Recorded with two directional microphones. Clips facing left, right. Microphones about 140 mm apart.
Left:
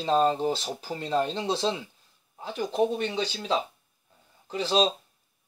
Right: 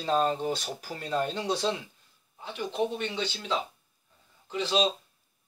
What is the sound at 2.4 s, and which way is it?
Speech, 40° left (ahead or behind).